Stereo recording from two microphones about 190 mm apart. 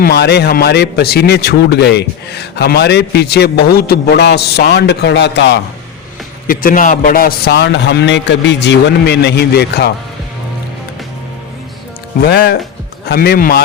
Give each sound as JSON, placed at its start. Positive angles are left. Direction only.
{"t": 0.0, "sound": "a man's voice", "side_deg": 60}
{"t": 6.5, "sound": "a man's voice", "side_deg": 45}
{"t": 12.2, "sound": "a man's voice", "side_deg": 55}